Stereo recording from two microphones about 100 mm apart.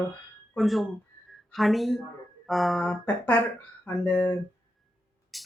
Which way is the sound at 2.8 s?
10° left (ahead or behind).